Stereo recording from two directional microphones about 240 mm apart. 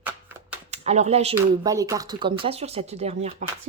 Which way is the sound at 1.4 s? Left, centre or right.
Centre.